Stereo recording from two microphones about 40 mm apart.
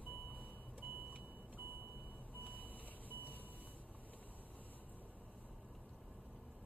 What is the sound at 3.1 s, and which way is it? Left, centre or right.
Vehicle, right.